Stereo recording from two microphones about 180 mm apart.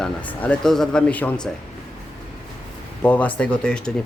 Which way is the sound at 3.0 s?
10° left (ahead or behind).